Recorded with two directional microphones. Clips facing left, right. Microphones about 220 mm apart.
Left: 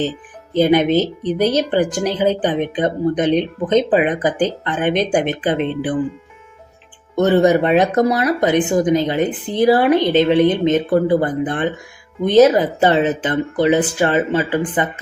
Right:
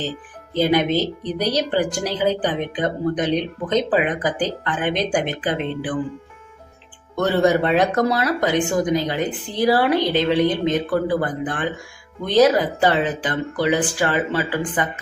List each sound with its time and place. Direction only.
0.5 s speech: 20° left (ahead or behind)
7.2 s speech: 20° left (ahead or behind)